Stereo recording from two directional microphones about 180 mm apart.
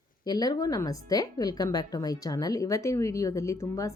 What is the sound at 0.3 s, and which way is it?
Speech, 20° left (ahead or behind).